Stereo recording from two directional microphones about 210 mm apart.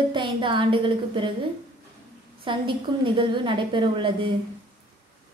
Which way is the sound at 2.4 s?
25° right (ahead or behind).